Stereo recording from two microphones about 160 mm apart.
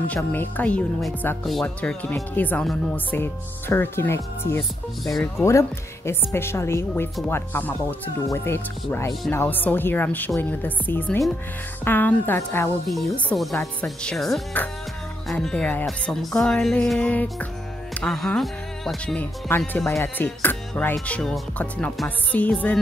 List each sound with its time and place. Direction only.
0.1 s speech: 10° left (ahead or behind)
5.0 s speech: centre (ahead or behind)
5.4 s speech: 15° left (ahead or behind)
12.8 s speech: 5° left (ahead or behind)